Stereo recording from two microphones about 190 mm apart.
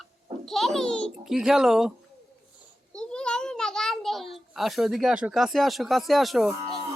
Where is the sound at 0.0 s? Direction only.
Centre (ahead or behind).